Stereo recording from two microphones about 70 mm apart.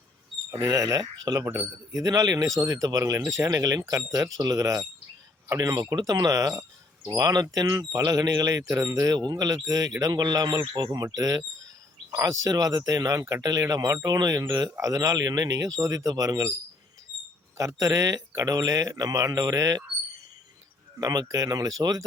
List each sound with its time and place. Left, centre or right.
0.6 s speech: right
5.5 s speech: right
7.5 s speech: right
9.1 s speech: right
9.6 s speech: right
11.1 s speech: right
17.6 s speech: right
21.0 s speech: right